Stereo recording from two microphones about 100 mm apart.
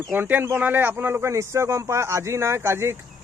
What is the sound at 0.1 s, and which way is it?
Speech, 20° right (ahead or behind).